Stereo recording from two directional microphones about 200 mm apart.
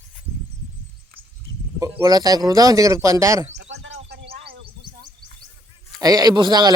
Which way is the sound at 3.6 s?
60° right (ahead or behind).